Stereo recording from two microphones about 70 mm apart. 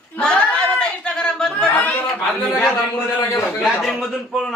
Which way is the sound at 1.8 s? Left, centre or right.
Left.